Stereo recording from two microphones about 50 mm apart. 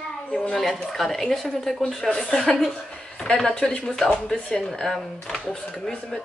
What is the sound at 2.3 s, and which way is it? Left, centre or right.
Speech, centre.